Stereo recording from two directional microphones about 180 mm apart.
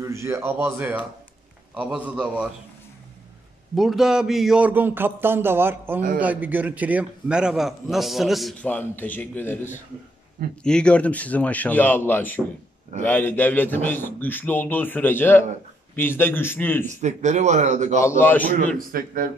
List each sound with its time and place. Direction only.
0.0 s speech: 15° right (ahead or behind)
3.7 s a man's voice: centre (ahead or behind)
16.8 s a man's voice: 40° right (ahead or behind)
18.0 s a man's voice: 10° left (ahead or behind)
18.9 s a man's voice: 50° right (ahead or behind)